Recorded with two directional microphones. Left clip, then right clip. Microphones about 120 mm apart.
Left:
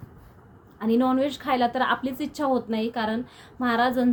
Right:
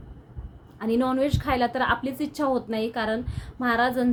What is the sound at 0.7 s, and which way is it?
A woman's voice, 20° right (ahead or behind).